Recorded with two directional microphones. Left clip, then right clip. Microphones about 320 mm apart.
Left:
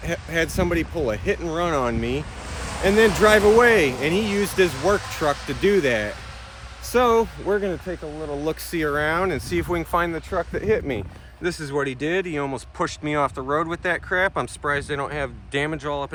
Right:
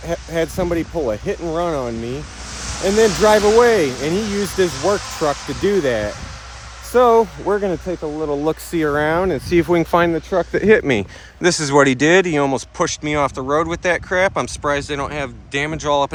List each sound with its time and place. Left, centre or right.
0.0 s speech: centre
2.5 s a sound: left
3.2 s speech: centre; by 11.0 s right
11.4 s speech: right